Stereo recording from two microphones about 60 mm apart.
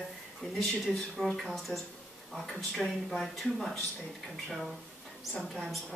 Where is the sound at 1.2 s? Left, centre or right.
Centre.